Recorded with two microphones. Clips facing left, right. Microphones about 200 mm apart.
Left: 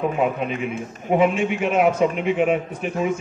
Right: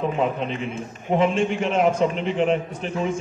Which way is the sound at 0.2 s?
10° left (ahead or behind).